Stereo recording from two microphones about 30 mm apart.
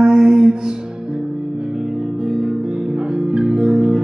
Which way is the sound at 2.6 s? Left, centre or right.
Right.